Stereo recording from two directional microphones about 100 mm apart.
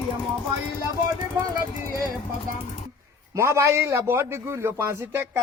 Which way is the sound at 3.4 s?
30° right (ahead or behind).